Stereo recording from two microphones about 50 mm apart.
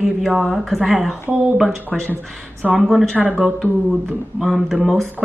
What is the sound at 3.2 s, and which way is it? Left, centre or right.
Speech, centre.